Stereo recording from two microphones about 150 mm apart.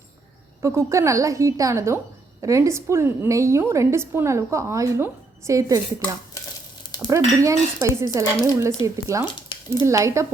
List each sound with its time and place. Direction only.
0.6 s a woman's voice: 20° right (ahead or behind)
6.8 s sizzle: 30° left (ahead or behind)
7.4 s a woman's voice: 20° right (ahead or behind)
9.5 s a sound: 35° left (ahead or behind)
9.8 s a woman's voice: 20° right (ahead or behind)